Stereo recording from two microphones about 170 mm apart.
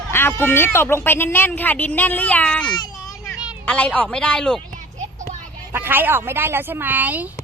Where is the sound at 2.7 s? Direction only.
25° left (ahead or behind).